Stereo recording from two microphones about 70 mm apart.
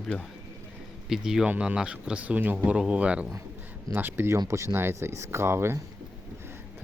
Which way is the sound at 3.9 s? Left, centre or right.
Right.